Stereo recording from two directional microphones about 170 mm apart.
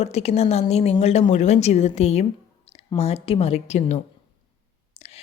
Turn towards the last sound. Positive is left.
turn(degrees=40)  # may be behind; listen again after turning